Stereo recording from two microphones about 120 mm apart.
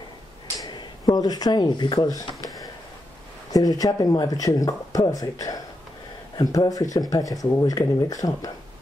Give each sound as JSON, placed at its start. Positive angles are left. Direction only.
{"t": 0.7, "sound": "speech", "side_deg": 35}